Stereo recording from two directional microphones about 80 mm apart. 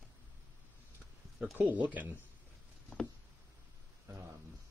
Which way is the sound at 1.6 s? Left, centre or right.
Centre.